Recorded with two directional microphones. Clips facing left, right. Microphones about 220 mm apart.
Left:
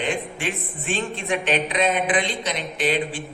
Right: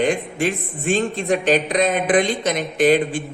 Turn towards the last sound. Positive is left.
turn(degrees=-45)  # may be behind; listen again after turning